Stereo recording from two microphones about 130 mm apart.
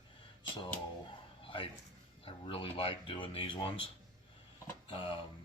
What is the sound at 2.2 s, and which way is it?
Speech, 45° left (ahead or behind).